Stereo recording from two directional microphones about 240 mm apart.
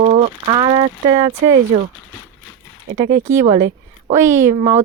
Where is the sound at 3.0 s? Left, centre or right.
Right.